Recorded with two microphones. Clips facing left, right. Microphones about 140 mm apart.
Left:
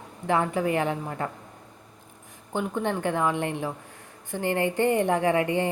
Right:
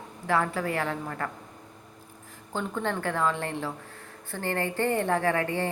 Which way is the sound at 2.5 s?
15° left (ahead or behind).